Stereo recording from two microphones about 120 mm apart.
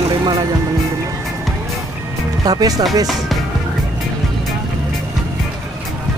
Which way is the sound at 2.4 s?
30° right (ahead or behind).